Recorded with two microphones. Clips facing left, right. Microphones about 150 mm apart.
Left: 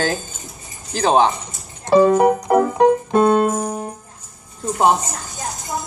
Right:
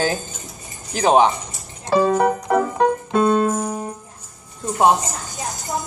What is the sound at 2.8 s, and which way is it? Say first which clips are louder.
Keyboard: left 4 dB; 20° left (ahead or behind).